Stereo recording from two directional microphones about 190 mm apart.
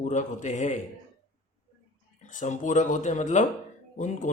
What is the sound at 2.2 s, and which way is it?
Speech, 40° left (ahead or behind).